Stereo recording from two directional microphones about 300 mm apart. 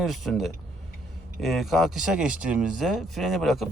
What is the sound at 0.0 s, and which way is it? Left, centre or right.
Speech, centre.